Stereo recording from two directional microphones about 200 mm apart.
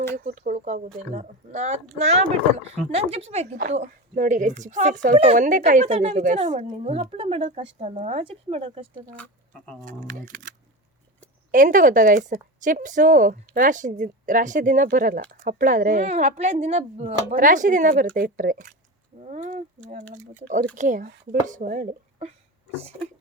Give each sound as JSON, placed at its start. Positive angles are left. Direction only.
{"t": 0.3, "sound": "a woman's voice", "side_deg": -40}
{"t": 9.0, "sound": "speech", "side_deg": 5}
{"t": 10.0, "sound": "a woman's voice", "side_deg": -40}
{"t": 11.5, "sound": "a woman's voice", "side_deg": -40}